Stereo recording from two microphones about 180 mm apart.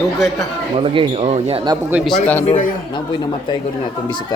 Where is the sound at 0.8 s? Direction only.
35° right (ahead or behind).